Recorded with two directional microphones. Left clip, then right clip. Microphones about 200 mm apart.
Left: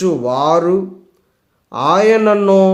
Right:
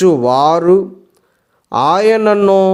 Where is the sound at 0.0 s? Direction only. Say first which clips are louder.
Right 5 dB; 40° right (ahead or behind).